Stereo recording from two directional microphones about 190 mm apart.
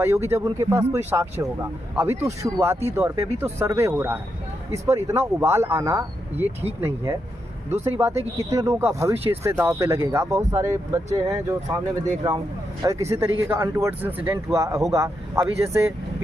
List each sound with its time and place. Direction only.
0.0 s speech: 15° right (ahead or behind)
12.8 s speech: 15° right (ahead or behind)